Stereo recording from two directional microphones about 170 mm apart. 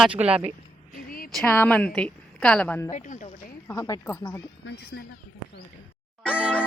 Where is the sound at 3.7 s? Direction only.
20° left (ahead or behind).